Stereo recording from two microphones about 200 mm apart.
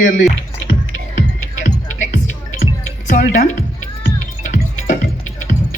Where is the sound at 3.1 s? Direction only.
40° left (ahead or behind).